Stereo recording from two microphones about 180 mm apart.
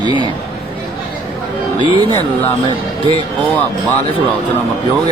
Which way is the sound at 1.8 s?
25° right (ahead or behind).